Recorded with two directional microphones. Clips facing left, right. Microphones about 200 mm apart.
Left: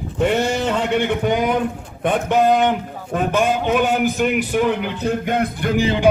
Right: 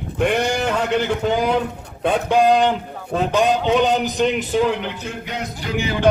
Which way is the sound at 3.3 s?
15° right (ahead or behind).